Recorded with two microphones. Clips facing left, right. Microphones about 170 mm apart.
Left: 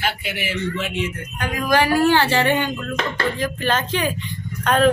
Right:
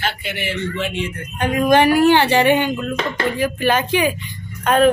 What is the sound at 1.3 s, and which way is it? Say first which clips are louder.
Speech: right 6 dB; 25° right (ahead or behind).